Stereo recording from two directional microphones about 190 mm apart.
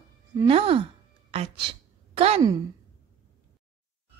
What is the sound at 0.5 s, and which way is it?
Speech, 30° right (ahead or behind).